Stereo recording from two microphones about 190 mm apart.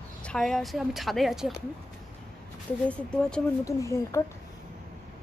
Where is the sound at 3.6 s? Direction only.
15° left (ahead or behind).